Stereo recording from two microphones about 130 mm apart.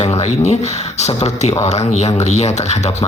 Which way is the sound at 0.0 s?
55° left (ahead or behind).